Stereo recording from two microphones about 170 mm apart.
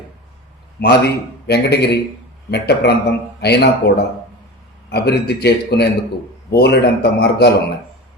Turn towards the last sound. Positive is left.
turn(degrees=70)  # may be behind; listen again after turning